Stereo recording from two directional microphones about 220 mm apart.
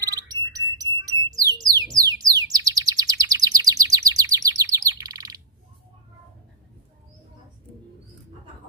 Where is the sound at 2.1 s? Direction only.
15° right (ahead or behind).